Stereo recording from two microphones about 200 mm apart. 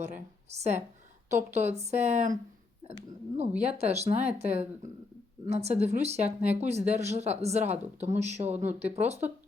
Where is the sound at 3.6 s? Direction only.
30° right (ahead or behind).